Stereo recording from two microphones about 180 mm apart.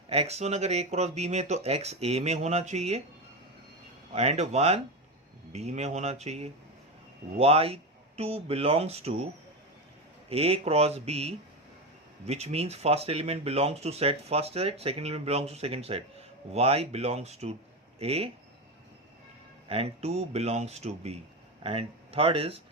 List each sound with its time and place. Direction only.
0.1 s speech: 35° right (ahead or behind)
4.1 s speech: 35° right (ahead or behind)
10.2 s speech: 35° right (ahead or behind)
19.6 s speech: 35° right (ahead or behind)